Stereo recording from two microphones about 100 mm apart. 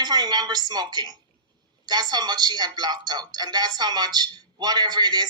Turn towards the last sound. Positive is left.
turn(degrees=-45)  # may be behind; listen again after turning